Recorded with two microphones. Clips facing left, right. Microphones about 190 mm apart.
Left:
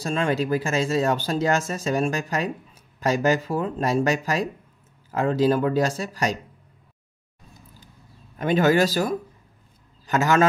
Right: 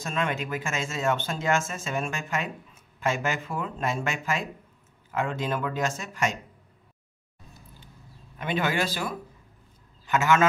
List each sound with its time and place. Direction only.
0.0 s speech: 35° left (ahead or behind)
8.4 s a man's voice: 40° left (ahead or behind)